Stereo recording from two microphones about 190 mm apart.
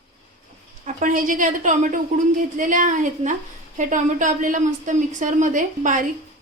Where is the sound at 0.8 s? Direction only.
45° right (ahead or behind).